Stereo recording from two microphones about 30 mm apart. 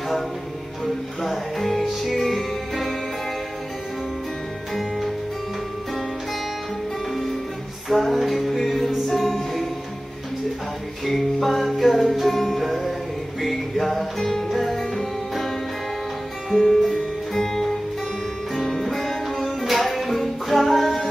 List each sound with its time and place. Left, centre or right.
1.2 s music: centre
4.7 s music: centre
7.9 s music: centre
9.3 s music: centre
11.1 s music: centre
16.4 s music: centre
17.3 s music: centre